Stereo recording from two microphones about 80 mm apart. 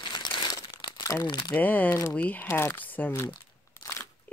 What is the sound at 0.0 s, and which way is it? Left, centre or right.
Crumpling, left.